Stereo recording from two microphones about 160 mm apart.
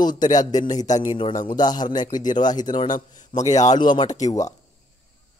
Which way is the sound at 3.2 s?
50° left (ahead or behind).